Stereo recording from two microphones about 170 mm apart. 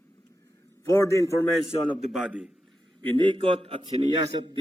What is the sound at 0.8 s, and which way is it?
Speech, 15° left (ahead or behind).